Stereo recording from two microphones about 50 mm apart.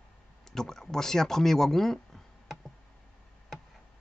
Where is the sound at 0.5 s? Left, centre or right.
Centre.